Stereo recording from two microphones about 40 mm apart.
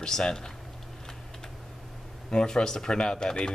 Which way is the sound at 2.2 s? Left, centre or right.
Centre.